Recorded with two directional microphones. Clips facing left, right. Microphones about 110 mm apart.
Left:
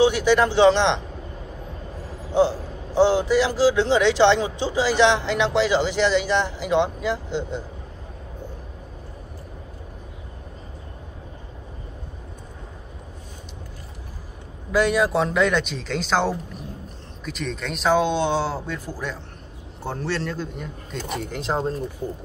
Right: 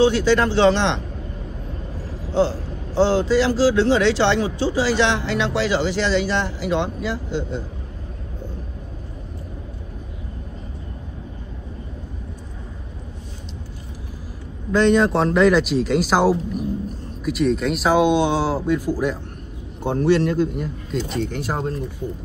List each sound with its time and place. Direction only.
0.0 s a man's voice: 15° left (ahead or behind)
2.3 s a man's voice: 15° left (ahead or behind)
14.7 s speech: 5° left (ahead or behind); by 20.6 s 10° right (ahead or behind)
21.3 s speech: 25° left (ahead or behind)